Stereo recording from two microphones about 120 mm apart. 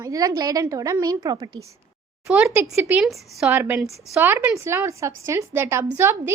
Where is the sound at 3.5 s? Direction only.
20° right (ahead or behind).